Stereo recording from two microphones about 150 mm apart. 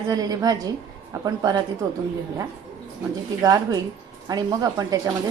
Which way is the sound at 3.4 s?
25° right (ahead or behind).